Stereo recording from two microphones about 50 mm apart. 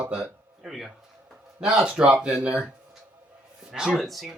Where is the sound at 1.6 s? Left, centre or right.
Centre.